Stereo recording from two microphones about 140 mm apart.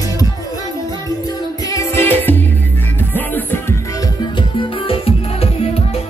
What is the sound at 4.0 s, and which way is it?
Music, 35° left (ahead or behind).